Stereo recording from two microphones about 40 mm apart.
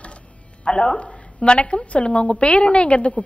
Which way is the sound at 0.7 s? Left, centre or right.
Left.